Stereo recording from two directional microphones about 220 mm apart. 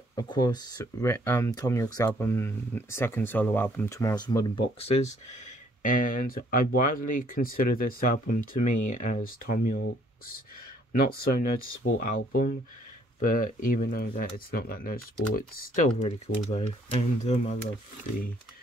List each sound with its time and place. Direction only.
0.1 s speech: 20° left (ahead or behind); by 9.8 s 40° left (ahead or behind)
10.9 s speech: 45° left (ahead or behind)